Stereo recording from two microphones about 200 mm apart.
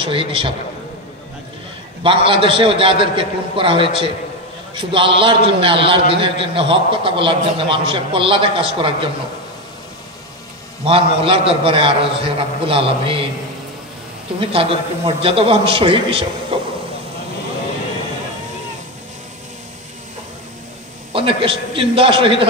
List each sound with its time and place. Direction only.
0.0 s a man's voice: 25° right (ahead or behind)
2.0 s a man's voice: 25° right (ahead or behind)
10.9 s a man's voice: 25° right (ahead or behind)
14.4 s a man's voice: 25° right (ahead or behind)
21.1 s a man's voice: 25° right (ahead or behind)